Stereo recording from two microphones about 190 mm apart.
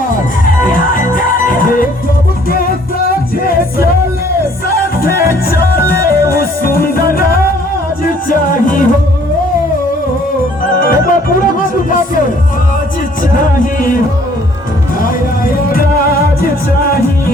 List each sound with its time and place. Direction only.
0.4 s music: 45° left (ahead or behind)
10.8 s music: 50° left (ahead or behind)
13.3 s music: 45° left (ahead or behind)
15.0 s music: 50° left (ahead or behind)